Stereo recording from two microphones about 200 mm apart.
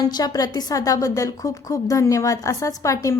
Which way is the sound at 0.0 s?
20° left (ahead or behind).